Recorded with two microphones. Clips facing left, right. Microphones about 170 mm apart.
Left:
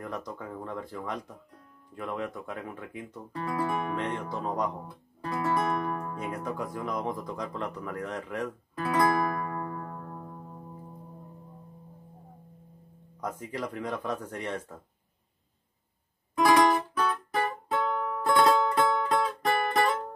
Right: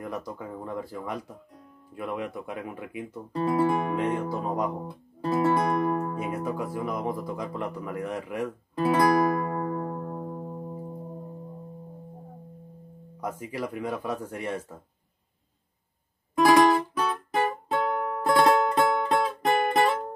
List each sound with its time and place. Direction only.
0.0 s speech: 10° right (ahead or behind)
3.4 s music: 25° right (ahead or behind)
3.9 s speech: 10° right (ahead or behind)
4.8 s music: 20° right (ahead or behind)
6.1 s speech: 10° right (ahead or behind)
8.7 s music: 20° right (ahead or behind)
13.2 s speech: 10° right (ahead or behind)
16.4 s music: 20° right (ahead or behind)